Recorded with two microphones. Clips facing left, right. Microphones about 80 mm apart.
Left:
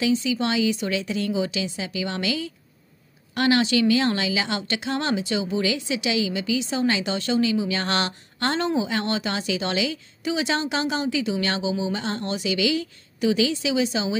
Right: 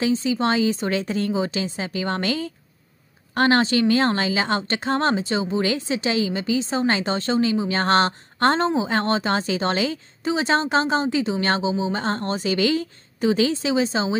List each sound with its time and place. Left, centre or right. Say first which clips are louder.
0.0 s a woman's voice: right 2 dB; right